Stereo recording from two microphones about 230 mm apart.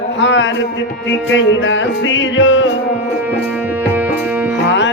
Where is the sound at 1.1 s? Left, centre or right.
Left.